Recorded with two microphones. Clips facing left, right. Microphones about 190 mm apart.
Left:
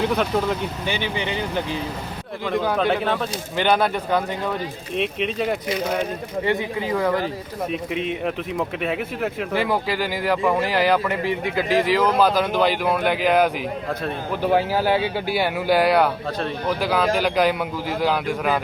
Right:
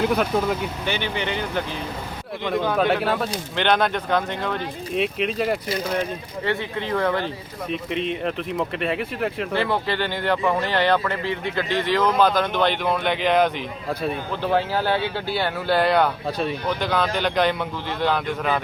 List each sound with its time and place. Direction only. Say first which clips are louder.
0.2 s speech: even; 5° right (ahead or behind)
1.0 s speech: left 1 dB; 15° left (ahead or behind)
2.7 s speech: even; 5° right (ahead or behind)
3.5 s speech: left 1 dB; 10° left (ahead or behind)
4.9 s speech: even; centre (ahead or behind)
6.4 s speech: left 2 dB; 15° left (ahead or behind)